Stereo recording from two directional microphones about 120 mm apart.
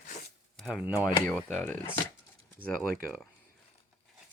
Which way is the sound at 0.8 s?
15° right (ahead or behind).